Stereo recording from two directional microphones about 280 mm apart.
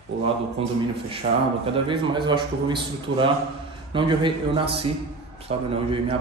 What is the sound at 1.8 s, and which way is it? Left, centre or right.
A man's voice, centre.